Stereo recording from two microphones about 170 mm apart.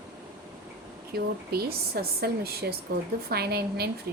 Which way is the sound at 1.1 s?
65° right (ahead or behind).